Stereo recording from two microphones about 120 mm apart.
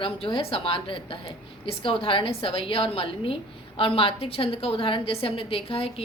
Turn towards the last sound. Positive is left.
turn(degrees=55)  # may be behind; listen again after turning